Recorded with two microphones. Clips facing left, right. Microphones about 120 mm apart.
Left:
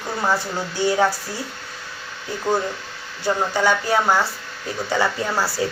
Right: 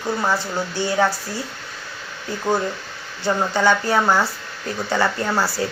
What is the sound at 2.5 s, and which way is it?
Speech, 15° right (ahead or behind).